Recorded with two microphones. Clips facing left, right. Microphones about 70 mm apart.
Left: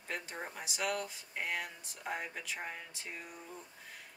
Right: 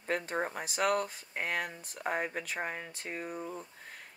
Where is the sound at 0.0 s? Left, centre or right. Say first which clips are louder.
Right 9 dB; right.